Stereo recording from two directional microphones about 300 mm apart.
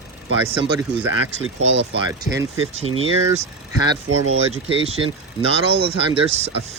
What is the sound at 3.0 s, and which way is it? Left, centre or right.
Speech, centre.